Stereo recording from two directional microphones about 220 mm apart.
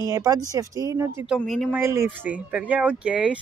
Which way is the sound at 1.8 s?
10° right (ahead or behind).